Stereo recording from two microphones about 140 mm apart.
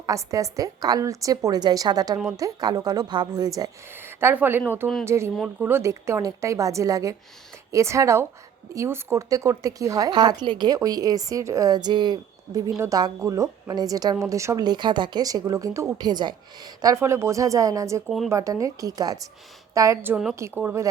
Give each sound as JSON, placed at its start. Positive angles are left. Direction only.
{"t": 0.0, "sound": "speech", "side_deg": -25}